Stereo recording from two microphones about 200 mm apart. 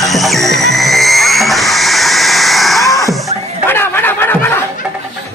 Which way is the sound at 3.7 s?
10° left (ahead or behind).